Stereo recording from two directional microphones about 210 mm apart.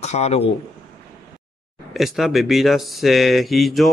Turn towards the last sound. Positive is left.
turn(degrees=0)  # may be behind; listen again after turning